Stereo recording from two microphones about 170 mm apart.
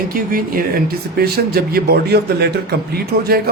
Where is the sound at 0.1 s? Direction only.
55° right (ahead or behind).